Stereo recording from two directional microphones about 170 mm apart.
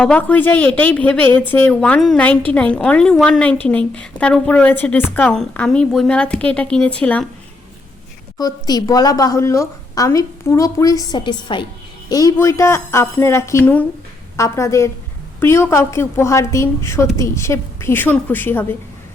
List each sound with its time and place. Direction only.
0.0 s a woman's voice: 10° left (ahead or behind)
8.4 s a woman's voice: 25° left (ahead or behind)